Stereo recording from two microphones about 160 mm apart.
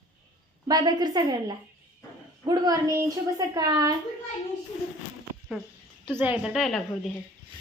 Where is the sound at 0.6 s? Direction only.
25° right (ahead or behind).